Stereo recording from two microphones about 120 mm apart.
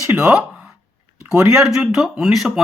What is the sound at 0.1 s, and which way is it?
Speech, 5° right (ahead or behind).